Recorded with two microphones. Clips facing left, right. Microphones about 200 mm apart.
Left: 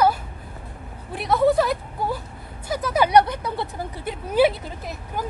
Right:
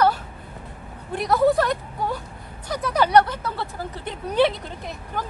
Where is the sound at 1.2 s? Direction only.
Centre (ahead or behind).